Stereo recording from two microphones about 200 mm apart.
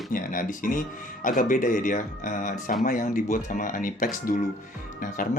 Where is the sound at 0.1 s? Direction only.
45° left (ahead or behind).